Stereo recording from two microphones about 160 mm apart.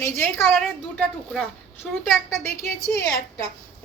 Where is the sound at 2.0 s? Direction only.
15° left (ahead or behind).